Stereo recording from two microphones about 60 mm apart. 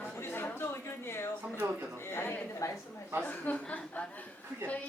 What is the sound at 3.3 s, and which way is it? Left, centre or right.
Speech, left.